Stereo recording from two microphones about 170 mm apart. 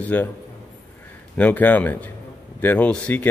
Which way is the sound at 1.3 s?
10° left (ahead or behind).